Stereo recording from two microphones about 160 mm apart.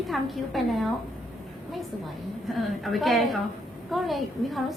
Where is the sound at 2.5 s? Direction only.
Centre (ahead or behind).